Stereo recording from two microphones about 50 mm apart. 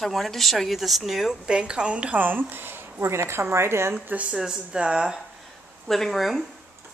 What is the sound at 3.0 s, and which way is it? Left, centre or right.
Speech, right.